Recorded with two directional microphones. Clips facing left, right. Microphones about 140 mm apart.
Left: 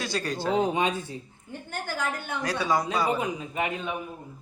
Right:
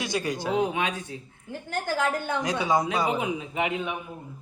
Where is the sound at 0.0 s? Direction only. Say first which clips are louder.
Right 1 dB; 15° right (ahead or behind).